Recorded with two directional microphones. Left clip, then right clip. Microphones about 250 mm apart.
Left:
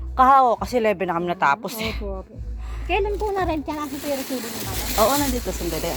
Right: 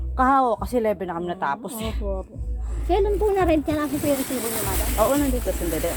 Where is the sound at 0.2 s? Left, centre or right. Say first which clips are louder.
Left 4 dB; left.